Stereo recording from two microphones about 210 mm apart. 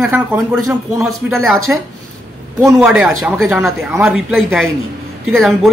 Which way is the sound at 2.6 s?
5° right (ahead or behind).